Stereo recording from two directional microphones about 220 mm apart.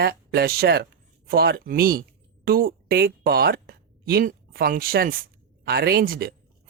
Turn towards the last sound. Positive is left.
turn(degrees=-40)  # may be behind; listen again after turning